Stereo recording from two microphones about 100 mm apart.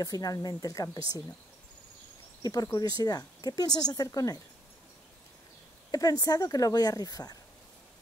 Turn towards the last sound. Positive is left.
turn(degrees=40)  # may be behind; listen again after turning